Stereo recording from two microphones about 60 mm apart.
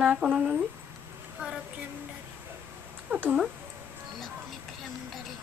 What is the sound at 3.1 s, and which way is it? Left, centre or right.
Speech, right.